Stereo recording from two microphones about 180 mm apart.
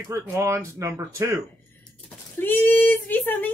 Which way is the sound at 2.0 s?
10° left (ahead or behind).